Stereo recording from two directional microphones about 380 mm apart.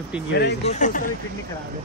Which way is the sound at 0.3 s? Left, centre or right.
Left.